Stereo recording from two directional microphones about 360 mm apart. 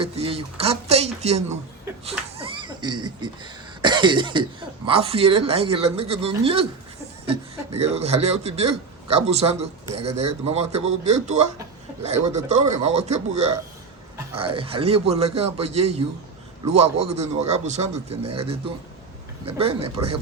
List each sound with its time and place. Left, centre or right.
0.0 s a man's voice: centre
3.8 s cough: centre
4.9 s a man's voice: centre
7.8 s a man's voice: centre